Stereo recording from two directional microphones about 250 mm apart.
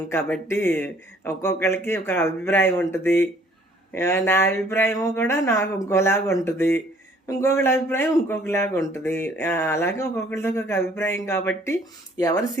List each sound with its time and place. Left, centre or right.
0.1 s a man's voice: centre